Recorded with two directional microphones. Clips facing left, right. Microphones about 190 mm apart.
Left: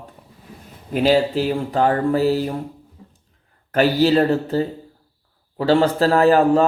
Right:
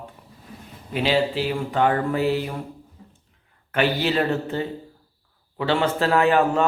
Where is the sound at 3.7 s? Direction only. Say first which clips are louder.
Left 6 dB; 40° left (ahead or behind).